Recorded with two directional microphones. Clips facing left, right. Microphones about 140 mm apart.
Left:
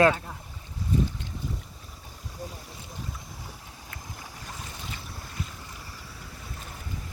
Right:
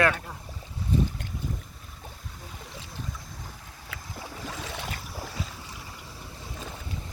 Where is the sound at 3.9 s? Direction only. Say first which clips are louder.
Right 5 dB; 90° right.